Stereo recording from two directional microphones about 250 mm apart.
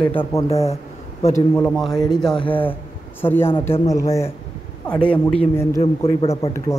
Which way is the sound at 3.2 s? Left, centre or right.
Centre.